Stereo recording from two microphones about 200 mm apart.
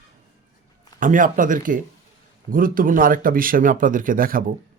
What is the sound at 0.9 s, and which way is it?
Speech, 40° right (ahead or behind).